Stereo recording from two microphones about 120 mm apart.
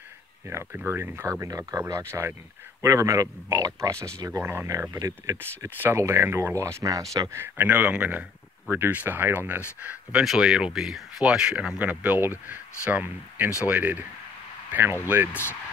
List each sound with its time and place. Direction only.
0.7 s speech: 20° right (ahead or behind)
7.3 s speech: 15° right (ahead or behind)